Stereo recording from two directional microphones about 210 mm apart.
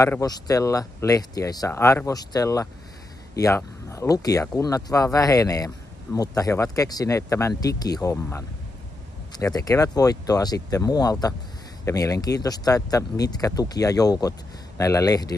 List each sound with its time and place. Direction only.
0.0 s speech: 15° left (ahead or behind)